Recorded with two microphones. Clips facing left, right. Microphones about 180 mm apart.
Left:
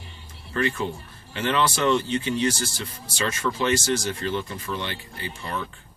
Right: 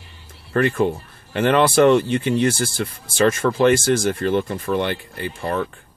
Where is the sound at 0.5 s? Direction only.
55° right (ahead or behind).